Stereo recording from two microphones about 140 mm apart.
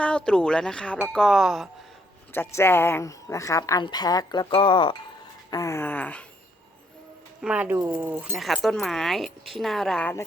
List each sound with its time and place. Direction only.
0.0 s speech: 5° left (ahead or behind)
2.3 s speech: 15° left (ahead or behind); by 4.9 s 35° left (ahead or behind)
5.5 s a sound: 20° left (ahead or behind)
7.4 s speech: 10° right (ahead or behind)